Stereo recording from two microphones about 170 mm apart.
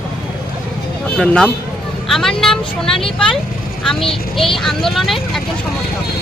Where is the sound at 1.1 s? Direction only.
5° left (ahead or behind).